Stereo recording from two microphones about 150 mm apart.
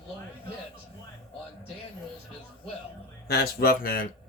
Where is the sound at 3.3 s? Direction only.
90° left.